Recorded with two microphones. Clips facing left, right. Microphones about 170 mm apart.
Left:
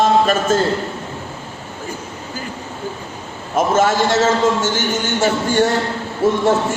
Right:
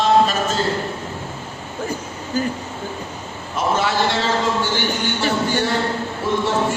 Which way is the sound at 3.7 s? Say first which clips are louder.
Left 6 dB; 45° left (ahead or behind).